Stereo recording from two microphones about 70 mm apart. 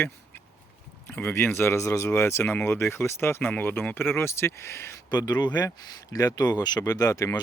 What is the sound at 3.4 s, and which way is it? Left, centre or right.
Speech, left.